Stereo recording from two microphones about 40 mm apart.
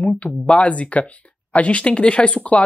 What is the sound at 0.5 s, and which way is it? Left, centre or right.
Speech, left.